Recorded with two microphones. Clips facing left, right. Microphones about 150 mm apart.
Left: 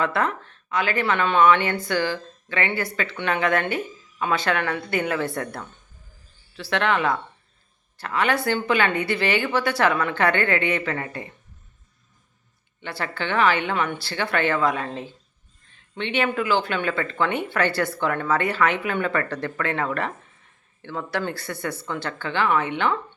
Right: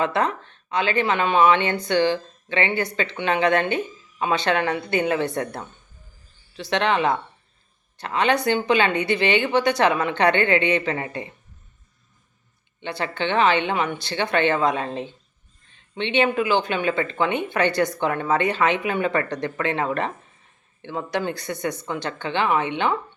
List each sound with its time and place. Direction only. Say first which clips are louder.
0.0 s speech: right 1 dB; 20° right (ahead or behind)
12.8 s speech: right 3 dB; 20° right (ahead or behind)